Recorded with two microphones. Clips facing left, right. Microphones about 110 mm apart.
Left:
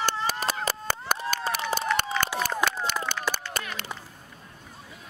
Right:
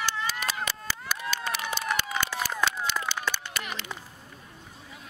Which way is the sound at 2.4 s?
50° left (ahead or behind).